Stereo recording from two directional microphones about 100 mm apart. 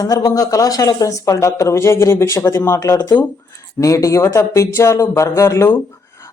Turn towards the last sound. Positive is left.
turn(degrees=30)  # may be behind; listen again after turning